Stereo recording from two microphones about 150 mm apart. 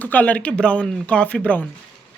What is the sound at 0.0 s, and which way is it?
Speech, 10° left (ahead or behind).